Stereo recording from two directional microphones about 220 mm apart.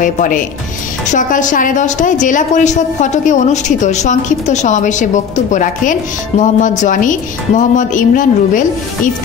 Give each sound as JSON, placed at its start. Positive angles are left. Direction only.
{"t": 0.0, "sound": "a woman's voice", "side_deg": 35}